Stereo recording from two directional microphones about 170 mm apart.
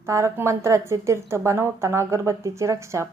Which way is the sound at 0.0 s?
15° right (ahead or behind).